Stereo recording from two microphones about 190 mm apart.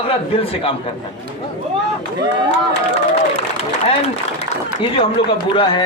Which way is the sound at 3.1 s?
35° left (ahead or behind).